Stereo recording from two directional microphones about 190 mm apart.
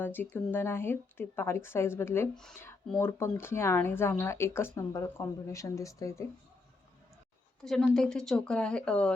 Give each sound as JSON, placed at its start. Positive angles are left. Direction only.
{"t": 0.0, "sound": "a woman's voice", "side_deg": 10}
{"t": 7.6, "sound": "speech", "side_deg": 0}